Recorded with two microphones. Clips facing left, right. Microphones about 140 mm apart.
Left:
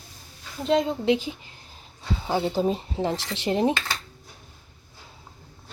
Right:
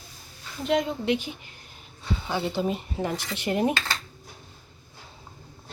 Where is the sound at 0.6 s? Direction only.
30° left (ahead or behind).